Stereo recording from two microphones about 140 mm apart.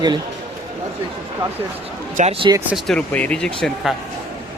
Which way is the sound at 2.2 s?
65° right (ahead or behind).